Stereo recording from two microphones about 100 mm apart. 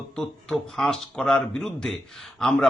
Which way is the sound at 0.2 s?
5° left (ahead or behind).